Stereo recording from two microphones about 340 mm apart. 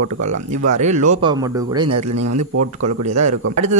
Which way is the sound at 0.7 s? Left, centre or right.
Right.